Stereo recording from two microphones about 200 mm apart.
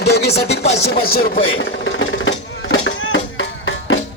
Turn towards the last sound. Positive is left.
turn(degrees=75)  # may be behind; listen again after turning